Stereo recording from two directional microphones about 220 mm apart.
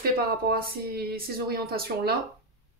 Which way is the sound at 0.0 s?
45° right (ahead or behind).